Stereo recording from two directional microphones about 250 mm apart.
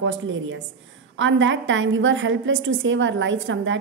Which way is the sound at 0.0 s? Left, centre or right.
Right.